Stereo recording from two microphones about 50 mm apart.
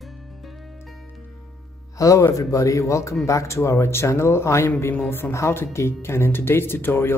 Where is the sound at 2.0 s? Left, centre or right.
Left.